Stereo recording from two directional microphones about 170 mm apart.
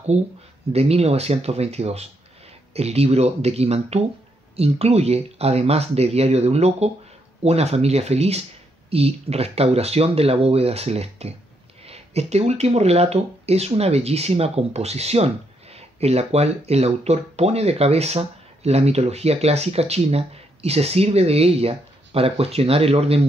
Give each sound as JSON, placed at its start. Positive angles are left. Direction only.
{"t": 0.7, "sound": "speech", "side_deg": -35}